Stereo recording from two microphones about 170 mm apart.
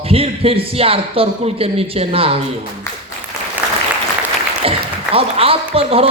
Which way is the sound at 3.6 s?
10° right (ahead or behind).